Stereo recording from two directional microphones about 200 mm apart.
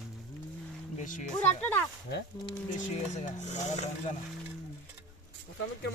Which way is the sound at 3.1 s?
35° left (ahead or behind).